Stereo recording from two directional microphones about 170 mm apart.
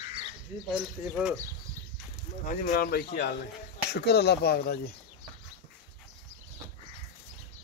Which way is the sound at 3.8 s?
75° left (ahead or behind).